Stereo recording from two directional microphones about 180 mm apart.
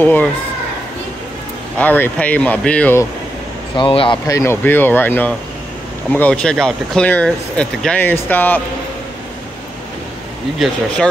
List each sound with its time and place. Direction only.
0.0 s speech: 10° left (ahead or behind)
1.8 s speech: 10° left (ahead or behind)
3.7 s speech: 30° left (ahead or behind)
4.3 s speech: 15° left (ahead or behind)